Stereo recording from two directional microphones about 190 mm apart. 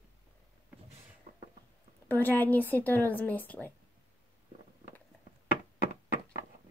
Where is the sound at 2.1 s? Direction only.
10° left (ahead or behind).